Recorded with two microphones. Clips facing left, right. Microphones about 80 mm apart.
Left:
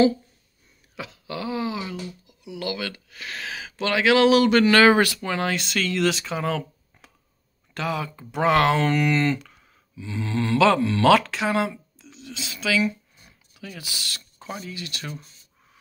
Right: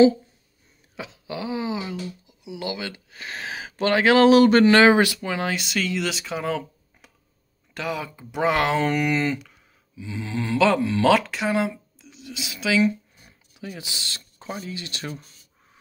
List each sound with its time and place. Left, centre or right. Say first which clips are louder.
0.9 s speech: even; centre